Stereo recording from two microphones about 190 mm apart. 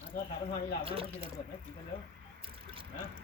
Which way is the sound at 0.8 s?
30° right (ahead or behind).